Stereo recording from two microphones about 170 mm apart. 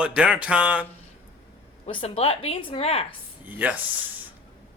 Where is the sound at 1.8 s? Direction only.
35° left (ahead or behind).